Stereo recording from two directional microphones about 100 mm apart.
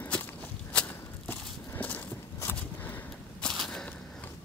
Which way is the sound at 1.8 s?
20° left (ahead or behind).